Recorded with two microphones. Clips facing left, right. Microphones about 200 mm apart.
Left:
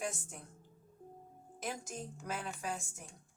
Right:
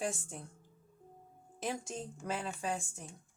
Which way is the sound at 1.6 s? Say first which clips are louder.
Right 3 dB; 30° right (ahead or behind).